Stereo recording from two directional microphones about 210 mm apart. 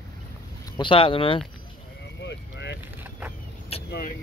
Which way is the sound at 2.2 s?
55° left (ahead or behind).